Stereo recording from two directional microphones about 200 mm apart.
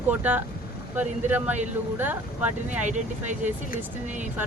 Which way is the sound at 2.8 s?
35° right (ahead or behind).